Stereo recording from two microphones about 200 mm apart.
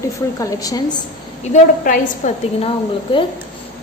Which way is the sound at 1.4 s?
40° left (ahead or behind).